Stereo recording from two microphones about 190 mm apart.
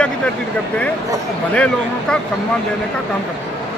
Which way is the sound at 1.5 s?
5° left (ahead or behind).